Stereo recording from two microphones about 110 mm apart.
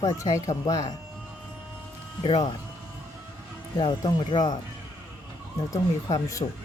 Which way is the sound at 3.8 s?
45° left (ahead or behind).